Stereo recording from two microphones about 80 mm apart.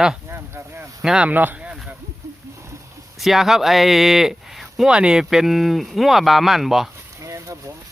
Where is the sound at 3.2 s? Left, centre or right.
Centre.